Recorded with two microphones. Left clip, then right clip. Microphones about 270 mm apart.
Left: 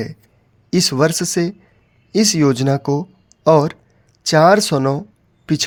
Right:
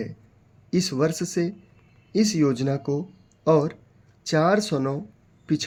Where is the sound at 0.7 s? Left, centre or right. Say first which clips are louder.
Left 8 dB; left.